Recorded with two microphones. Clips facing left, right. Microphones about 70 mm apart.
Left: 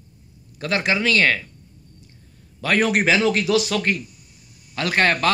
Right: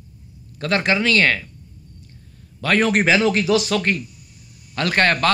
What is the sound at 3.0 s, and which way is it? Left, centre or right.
Speech, centre.